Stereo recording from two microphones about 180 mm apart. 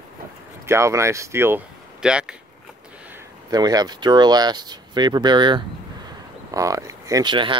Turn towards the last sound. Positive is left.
turn(degrees=-25)  # may be behind; listen again after turning